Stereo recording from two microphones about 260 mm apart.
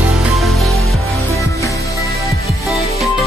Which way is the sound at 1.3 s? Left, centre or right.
Centre.